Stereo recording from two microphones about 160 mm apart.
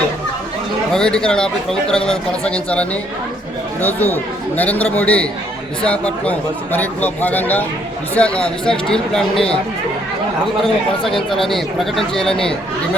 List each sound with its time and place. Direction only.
0.9 s a man's voice: 5° left (ahead or behind)
10.6 s speech: 5° left (ahead or behind)